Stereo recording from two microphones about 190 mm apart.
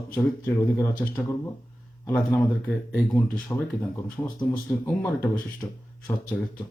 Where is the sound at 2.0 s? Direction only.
10° left (ahead or behind).